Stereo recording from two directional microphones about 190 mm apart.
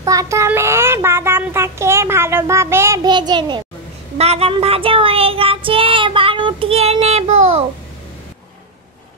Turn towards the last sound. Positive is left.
turn(degrees=-35)  # may be behind; listen again after turning